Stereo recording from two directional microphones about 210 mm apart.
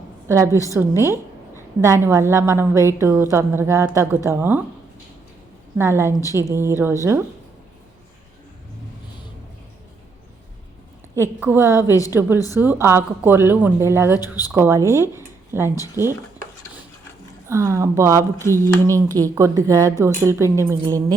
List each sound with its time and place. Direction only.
0.3 s a woman's voice: 15° right (ahead or behind)
5.7 s a woman's voice: 10° right (ahead or behind)
11.1 s a woman's voice: 10° right (ahead or behind)
11.9 s a woman's voice: 15° left (ahead or behind)
12.5 s a woman's voice: 10° right (ahead or behind)
17.4 s a woman's voice: 15° right (ahead or behind)